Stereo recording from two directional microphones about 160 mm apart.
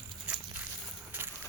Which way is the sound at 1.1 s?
10° right (ahead or behind).